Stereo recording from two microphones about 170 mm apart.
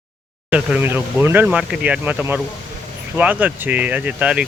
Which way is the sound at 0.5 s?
10° right (ahead or behind).